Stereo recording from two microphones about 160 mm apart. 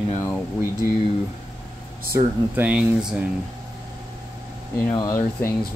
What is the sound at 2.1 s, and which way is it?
Speech, 10° right (ahead or behind).